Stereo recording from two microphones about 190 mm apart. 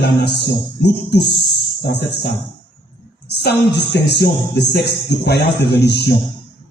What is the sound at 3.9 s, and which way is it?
Speech, 60° left (ahead or behind).